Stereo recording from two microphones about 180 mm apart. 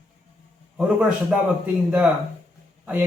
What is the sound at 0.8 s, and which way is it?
A man's voice, 5° right (ahead or behind).